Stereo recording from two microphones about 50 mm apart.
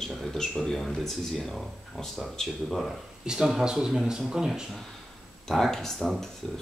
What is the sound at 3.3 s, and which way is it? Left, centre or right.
Speech, centre.